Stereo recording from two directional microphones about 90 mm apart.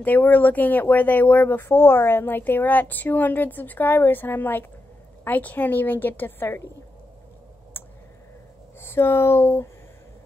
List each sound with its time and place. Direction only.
0.0 s speech: 20° left (ahead or behind)
7.7 s clicking: 25° left (ahead or behind)
8.8 s speech: 25° left (ahead or behind)